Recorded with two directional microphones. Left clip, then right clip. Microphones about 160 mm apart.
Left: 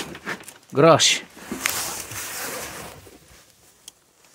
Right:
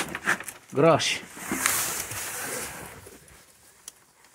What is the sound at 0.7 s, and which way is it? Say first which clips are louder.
Speech: left 6 dB; 45° left (ahead or behind).